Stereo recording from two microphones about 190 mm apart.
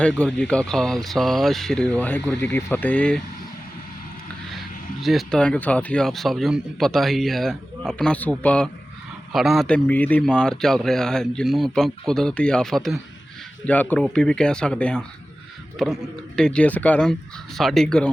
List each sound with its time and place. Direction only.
0.0 s speech: 5° left (ahead or behind)
4.5 s speech: centre (ahead or behind)